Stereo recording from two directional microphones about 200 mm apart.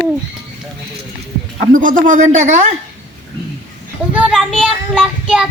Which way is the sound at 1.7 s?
40° right (ahead or behind).